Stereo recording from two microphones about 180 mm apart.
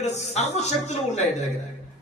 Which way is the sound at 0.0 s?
40° left (ahead or behind).